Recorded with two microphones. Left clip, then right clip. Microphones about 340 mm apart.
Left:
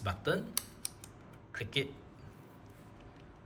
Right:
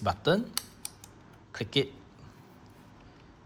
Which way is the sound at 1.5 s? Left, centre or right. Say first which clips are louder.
Right 6 dB; centre.